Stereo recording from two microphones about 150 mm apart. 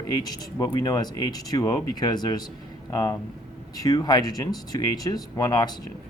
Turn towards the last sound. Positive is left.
turn(degrees=25)  # may be behind; listen again after turning